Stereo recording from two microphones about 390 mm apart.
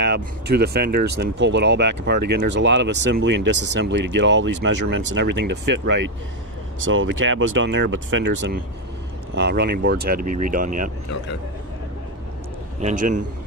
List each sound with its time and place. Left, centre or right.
0.0 s speech: right
12.8 s speech: centre